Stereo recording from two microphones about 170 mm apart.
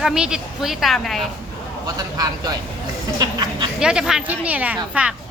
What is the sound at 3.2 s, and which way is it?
Speech, 25° right (ahead or behind).